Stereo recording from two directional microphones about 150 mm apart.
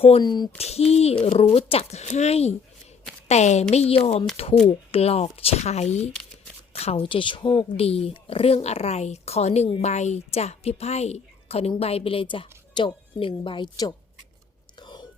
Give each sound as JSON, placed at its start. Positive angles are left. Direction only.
{"t": 0.0, "sound": "speech", "side_deg": 35}
{"t": 0.9, "sound": "a woman's voice", "side_deg": 45}
{"t": 14.8, "sound": "whispering", "side_deg": 30}